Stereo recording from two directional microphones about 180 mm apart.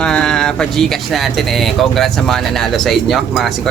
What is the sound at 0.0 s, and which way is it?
Speech, 5° left (ahead or behind).